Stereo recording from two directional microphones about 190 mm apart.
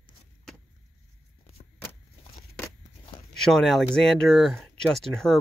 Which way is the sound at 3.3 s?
Centre (ahead or behind).